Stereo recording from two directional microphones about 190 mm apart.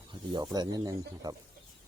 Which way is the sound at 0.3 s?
25° right (ahead or behind).